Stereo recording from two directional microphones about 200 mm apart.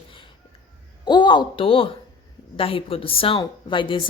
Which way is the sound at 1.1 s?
20° left (ahead or behind).